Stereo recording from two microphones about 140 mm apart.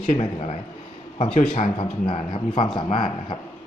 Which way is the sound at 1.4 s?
70° left (ahead or behind).